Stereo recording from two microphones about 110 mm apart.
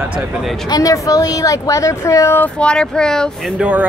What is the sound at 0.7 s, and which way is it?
Speech, 35° left (ahead or behind).